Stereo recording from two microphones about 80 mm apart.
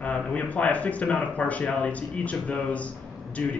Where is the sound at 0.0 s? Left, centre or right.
Centre.